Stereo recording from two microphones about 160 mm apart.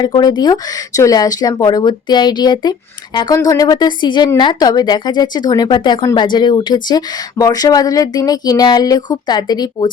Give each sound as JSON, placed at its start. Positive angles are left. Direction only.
{"t": 0.0, "sound": "speech", "side_deg": 25}